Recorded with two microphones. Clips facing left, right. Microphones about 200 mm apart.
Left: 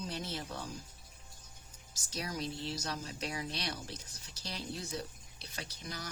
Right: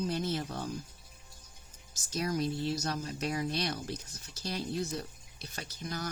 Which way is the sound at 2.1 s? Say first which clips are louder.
Right 7 dB; 50° right (ahead or behind).